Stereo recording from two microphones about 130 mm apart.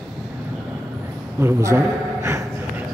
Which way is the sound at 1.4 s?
20° right (ahead or behind).